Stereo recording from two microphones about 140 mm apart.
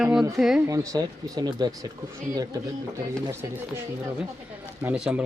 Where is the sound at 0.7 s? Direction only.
25° right (ahead or behind).